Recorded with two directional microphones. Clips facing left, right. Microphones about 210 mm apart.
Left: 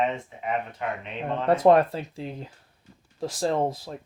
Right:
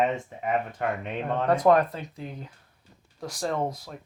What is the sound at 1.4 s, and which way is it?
Speech, 25° left (ahead or behind).